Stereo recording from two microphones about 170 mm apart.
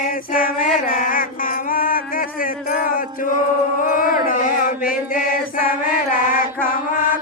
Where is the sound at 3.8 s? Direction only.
55° left (ahead or behind).